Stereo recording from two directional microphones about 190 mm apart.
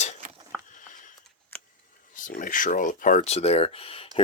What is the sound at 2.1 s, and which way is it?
Speech, 45° left (ahead or behind).